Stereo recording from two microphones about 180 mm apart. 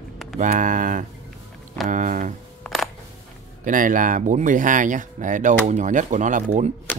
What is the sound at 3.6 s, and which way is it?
Speech, 45° right (ahead or behind).